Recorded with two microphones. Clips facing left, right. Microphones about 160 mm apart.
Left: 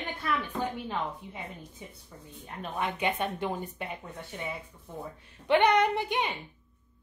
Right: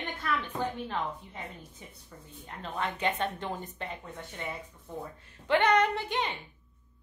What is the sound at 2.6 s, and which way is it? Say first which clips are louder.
A woman's voice: left 1 dB; 15° left (ahead or behind).